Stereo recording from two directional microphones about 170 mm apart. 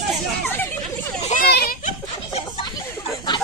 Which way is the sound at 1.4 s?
70° left (ahead or behind).